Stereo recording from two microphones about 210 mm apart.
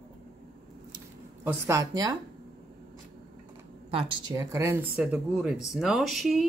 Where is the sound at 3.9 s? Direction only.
25° right (ahead or behind); by 6.5 s centre (ahead or behind).